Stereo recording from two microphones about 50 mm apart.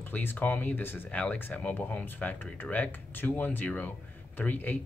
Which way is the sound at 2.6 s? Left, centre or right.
Left.